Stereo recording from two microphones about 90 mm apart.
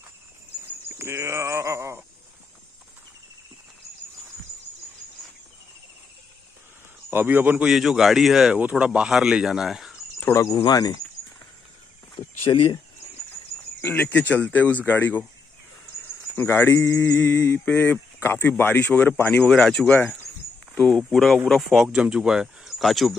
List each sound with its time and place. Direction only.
0.9 s speech: 30° right (ahead or behind)
7.1 s speech: 20° right (ahead or behind)
7.6 s speech: 5° right (ahead or behind)
8.5 s speech: 15° right (ahead or behind)
10.5 s speech: 50° left (ahead or behind)
12.5 s speech: 55° left (ahead or behind)
13.7 s speech: 20° left (ahead or behind)
16.3 s speech: 25° left (ahead or behind)
17.6 s speech: 20° left (ahead or behind)
19.4 s speech: 5° left (ahead or behind)